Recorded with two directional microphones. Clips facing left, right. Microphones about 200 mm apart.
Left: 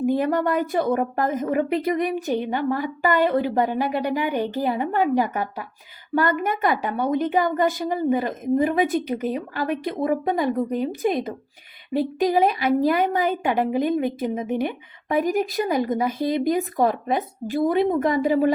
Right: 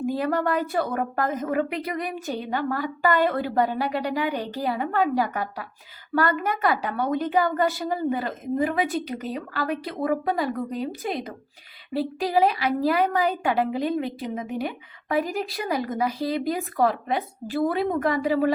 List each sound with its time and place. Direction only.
0.0 s a woman's voice: 20° left (ahead or behind)
12.5 s a woman's voice: 25° left (ahead or behind)